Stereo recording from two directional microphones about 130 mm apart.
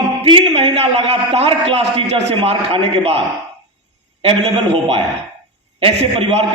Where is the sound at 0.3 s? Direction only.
45° right (ahead or behind).